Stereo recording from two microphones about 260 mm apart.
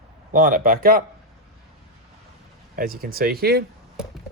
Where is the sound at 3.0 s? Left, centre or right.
Right.